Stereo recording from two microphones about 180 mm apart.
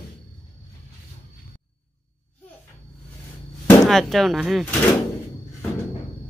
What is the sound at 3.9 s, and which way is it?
Speech, centre (ahead or behind).